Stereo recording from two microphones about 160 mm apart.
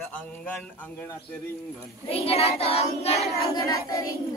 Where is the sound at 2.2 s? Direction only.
40° left (ahead or behind).